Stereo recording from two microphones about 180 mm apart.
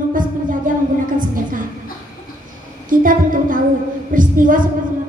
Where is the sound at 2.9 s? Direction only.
50° right (ahead or behind).